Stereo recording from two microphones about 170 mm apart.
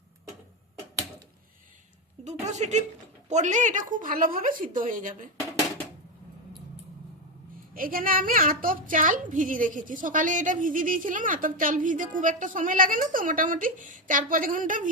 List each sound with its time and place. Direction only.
2.5 s a woman's voice: 40° right (ahead or behind)
7.7 s a woman's voice: 55° right (ahead or behind)